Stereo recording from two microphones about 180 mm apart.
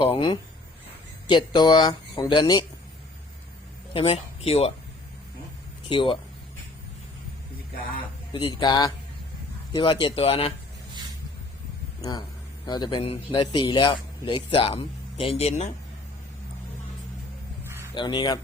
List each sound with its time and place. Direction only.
0.0 s a man's voice: 30° left (ahead or behind)
3.9 s speech: 30° left (ahead or behind)
5.9 s a man's voice: 25° left (ahead or behind)
8.3 s a man's voice: 30° left (ahead or behind)
12.6 s a man's voice: 25° left (ahead or behind)
17.9 s a man's voice: 25° left (ahead or behind)